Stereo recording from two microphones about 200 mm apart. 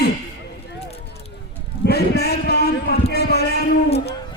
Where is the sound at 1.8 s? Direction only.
55° left (ahead or behind).